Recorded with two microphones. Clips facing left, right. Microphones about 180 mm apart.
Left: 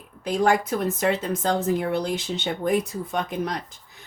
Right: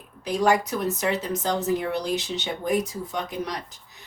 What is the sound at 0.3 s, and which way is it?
Speech, 55° left (ahead or behind).